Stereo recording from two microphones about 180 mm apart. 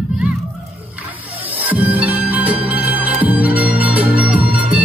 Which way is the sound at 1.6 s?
10° right (ahead or behind).